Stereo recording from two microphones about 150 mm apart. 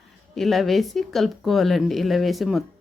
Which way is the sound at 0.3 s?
Centre (ahead or behind).